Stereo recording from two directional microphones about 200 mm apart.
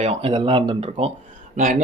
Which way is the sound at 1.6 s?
45° right (ahead or behind).